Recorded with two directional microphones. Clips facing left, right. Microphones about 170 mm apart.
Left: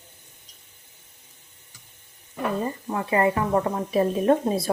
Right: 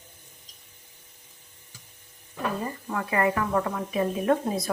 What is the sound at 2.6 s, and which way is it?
Speech, 25° left (ahead or behind).